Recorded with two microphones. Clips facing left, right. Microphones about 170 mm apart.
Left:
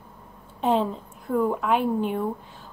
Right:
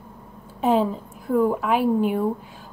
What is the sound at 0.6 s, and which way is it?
A woman's voice, 5° right (ahead or behind).